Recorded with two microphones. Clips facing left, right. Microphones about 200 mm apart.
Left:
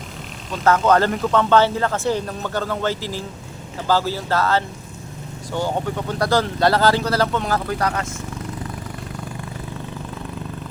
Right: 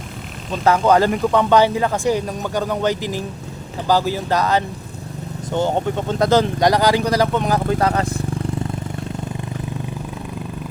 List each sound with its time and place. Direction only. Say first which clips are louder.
0.6 s speech: right 2 dB; 15° right (ahead or behind); by 8.2 s 35° right (ahead or behind)